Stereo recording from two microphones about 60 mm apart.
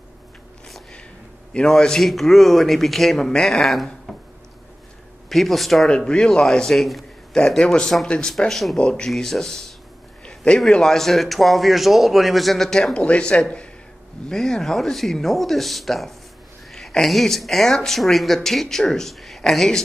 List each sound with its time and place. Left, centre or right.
1.5 s speech: centre
5.3 s speech: centre
5.9 s speech: centre
7.3 s speech: centre
8.7 s speech: centre
9.1 s speech: centre
10.2 s a sound: centre
10.7 s speech: centre
13.0 s speech: left